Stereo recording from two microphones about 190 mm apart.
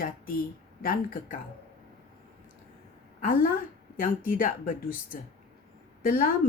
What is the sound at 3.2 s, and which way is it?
A woman's voice, 50° left (ahead or behind).